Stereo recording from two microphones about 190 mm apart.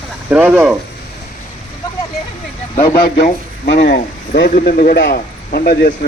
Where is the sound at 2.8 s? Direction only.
55° left (ahead or behind).